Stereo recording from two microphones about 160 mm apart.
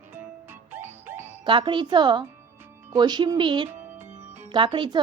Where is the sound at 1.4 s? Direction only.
30° right (ahead or behind).